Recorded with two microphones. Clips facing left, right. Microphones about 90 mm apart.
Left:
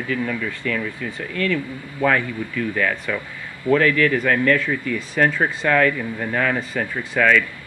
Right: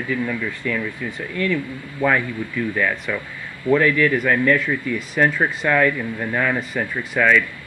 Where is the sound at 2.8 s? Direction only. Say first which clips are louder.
Even; 90° left.